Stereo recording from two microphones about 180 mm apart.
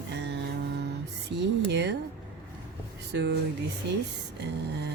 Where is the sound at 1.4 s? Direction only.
70° right (ahead or behind).